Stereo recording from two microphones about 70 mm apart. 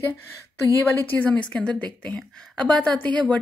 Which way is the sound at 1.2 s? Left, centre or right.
Centre.